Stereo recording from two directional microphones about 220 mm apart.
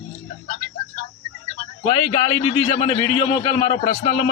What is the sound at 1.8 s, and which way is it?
A man's voice, 25° left (ahead or behind).